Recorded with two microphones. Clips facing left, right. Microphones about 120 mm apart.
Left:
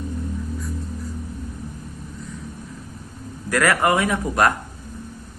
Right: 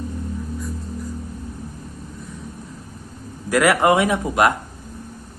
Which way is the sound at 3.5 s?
20° right (ahead or behind).